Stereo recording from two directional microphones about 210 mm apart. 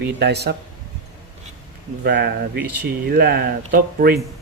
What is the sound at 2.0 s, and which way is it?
Speech, 50° right (ahead or behind).